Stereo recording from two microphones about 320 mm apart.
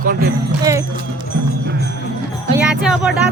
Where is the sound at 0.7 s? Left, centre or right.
Centre.